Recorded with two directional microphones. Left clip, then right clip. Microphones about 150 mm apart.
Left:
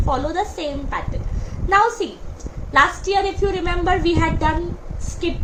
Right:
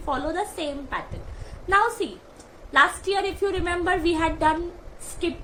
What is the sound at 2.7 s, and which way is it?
A woman's voice, 35° right (ahead or behind).